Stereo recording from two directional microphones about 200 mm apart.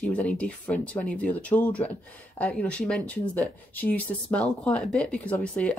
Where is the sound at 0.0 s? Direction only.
5° left (ahead or behind).